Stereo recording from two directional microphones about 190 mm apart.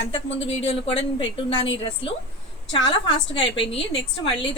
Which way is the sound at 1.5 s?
80° left.